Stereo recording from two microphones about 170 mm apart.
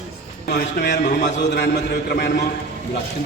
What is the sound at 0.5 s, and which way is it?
A man's voice, 85° left.